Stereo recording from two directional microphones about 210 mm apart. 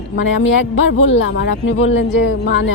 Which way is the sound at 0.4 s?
65° left (ahead or behind).